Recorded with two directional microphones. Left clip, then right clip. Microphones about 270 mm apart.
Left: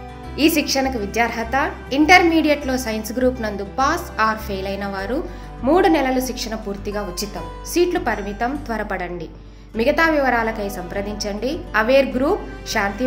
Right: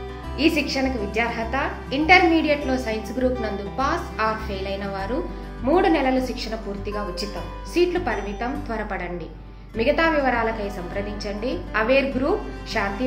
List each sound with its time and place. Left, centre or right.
0.4 s a woman's voice: left